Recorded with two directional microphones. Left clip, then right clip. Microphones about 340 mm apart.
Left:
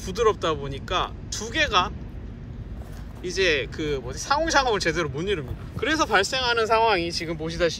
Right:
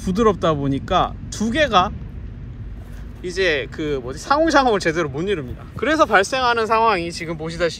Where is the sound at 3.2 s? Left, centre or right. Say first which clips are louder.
Right 3 dB; centre.